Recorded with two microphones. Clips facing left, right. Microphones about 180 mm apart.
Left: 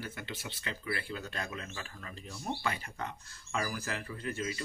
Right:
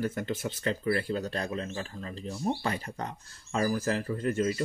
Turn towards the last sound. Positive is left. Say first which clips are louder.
# right 9 dB
turn(degrees=-45)  # may be behind; listen again after turning